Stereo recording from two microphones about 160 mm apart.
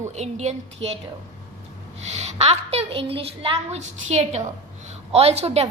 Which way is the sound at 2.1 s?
40° right (ahead or behind).